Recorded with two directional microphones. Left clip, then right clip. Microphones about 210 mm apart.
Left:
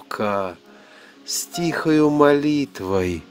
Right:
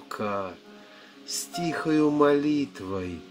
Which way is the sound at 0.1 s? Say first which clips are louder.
Left 7 dB; 45° left (ahead or behind).